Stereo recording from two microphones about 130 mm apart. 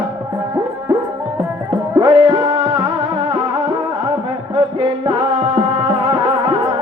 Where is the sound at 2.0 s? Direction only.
35° right (ahead or behind).